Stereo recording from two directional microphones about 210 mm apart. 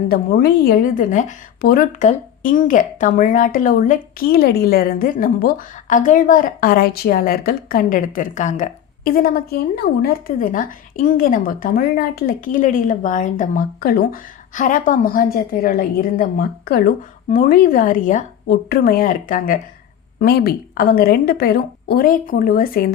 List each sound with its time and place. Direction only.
0.1 s a woman's voice: 45° left (ahead or behind)